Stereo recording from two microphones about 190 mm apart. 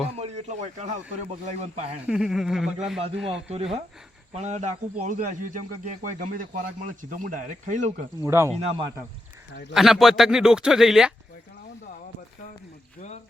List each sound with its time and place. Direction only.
0.2 s a man's voice: 35° right (ahead or behind)
2.0 s speech: 5° right (ahead or behind)
4.4 s a man's voice: 35° right (ahead or behind)
8.2 s speech: 15° right (ahead or behind)
9.7 s speech: centre (ahead or behind)